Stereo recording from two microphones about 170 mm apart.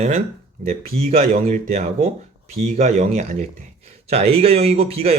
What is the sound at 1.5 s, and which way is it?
A man's voice, 40° right (ahead or behind).